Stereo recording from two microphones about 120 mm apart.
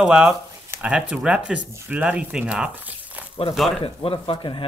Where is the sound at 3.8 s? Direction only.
50° left (ahead or behind).